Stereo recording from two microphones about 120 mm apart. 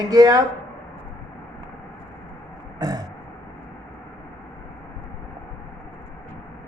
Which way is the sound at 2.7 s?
30° right (ahead or behind).